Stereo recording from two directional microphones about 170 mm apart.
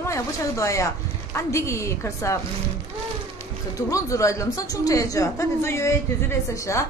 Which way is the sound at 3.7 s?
20° left (ahead or behind).